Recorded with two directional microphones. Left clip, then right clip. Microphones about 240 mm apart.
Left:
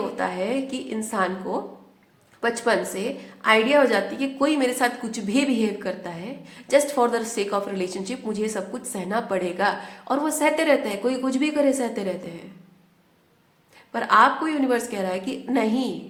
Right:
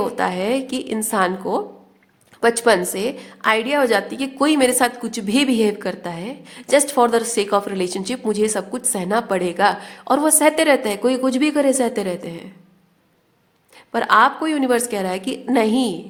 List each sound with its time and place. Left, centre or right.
0.2 s a woman's voice: right
13.9 s a woman's voice: right